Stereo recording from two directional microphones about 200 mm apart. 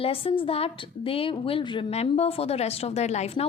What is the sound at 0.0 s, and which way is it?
A woman's voice, 30° left (ahead or behind).